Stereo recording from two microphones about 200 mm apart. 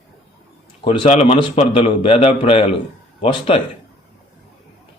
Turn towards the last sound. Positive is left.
turn(degrees=25)  # may be behind; listen again after turning